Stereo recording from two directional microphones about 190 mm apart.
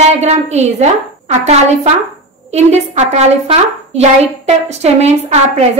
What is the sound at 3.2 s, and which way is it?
A woman's voice, 35° right (ahead or behind).